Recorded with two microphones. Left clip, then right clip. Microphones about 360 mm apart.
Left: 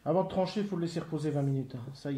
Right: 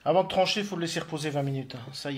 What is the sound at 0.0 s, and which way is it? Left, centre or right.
Speech, right.